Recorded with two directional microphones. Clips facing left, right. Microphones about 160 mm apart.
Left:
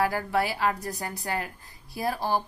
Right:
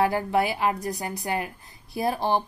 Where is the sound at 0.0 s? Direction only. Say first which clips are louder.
Right 3 dB; 20° right (ahead or behind).